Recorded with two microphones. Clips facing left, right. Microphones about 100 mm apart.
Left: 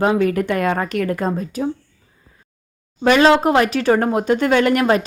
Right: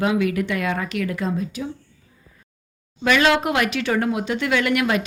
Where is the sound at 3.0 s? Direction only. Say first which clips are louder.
Left 5 dB; 35° left (ahead or behind).